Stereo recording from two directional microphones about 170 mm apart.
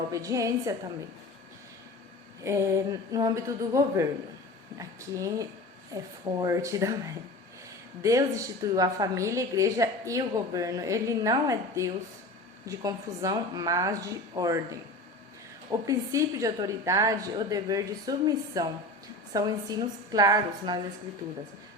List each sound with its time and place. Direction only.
0.1 s a woman's voice: 20° right (ahead or behind)
2.4 s a woman's voice: 15° right (ahead or behind)